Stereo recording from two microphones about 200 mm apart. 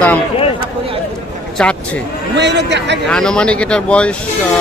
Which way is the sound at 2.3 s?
60° right (ahead or behind).